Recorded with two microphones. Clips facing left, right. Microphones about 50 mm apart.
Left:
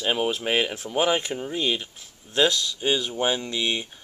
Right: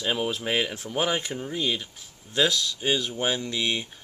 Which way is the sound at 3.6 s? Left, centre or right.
Centre.